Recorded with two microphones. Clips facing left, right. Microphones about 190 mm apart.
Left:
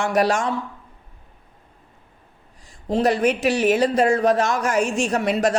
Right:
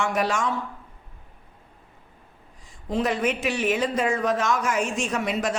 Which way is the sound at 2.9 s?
35° left (ahead or behind).